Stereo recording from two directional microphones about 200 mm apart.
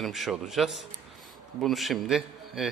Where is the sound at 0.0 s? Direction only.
Centre (ahead or behind).